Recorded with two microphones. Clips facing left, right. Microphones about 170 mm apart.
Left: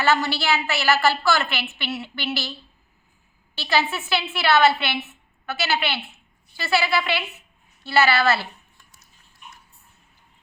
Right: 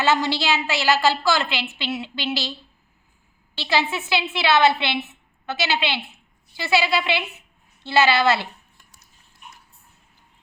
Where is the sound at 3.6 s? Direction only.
15° right (ahead or behind).